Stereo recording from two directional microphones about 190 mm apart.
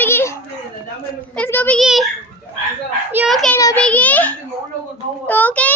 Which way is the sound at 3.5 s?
15° left (ahead or behind).